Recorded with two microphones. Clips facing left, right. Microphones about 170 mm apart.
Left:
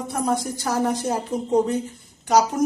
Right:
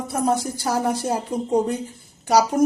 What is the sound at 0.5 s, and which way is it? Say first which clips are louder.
Speech: even; 10° right (ahead or behind).